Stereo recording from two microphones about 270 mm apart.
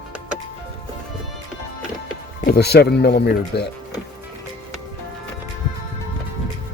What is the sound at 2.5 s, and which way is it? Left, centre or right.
Speech, left.